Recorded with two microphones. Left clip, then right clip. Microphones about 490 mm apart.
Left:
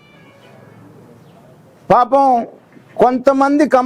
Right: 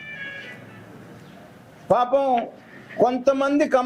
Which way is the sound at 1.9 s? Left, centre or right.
Left.